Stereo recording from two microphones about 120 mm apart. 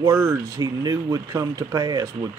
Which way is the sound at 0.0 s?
25° right (ahead or behind).